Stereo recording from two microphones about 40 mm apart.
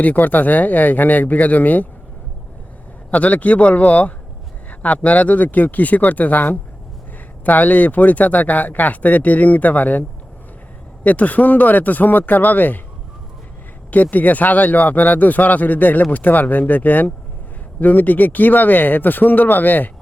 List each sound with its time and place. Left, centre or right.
0.0 s speech: left
3.1 s speech: left
11.0 s speech: left
13.9 s speech: left